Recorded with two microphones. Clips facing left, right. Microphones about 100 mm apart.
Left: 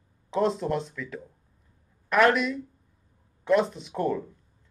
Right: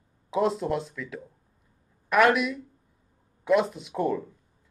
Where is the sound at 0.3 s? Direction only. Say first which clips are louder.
Even; 5° right (ahead or behind).